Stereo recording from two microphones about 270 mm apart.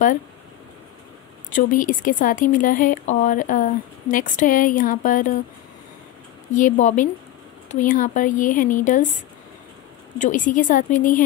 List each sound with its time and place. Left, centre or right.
1.5 s speech: left
6.5 s speech: left